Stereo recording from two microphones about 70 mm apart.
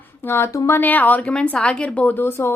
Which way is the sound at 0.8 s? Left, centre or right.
Left.